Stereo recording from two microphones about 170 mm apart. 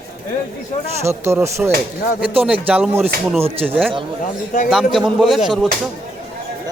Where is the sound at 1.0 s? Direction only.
15° right (ahead or behind); by 5.7 s centre (ahead or behind).